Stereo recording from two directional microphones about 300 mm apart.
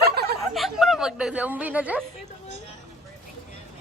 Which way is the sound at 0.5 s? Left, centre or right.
Centre.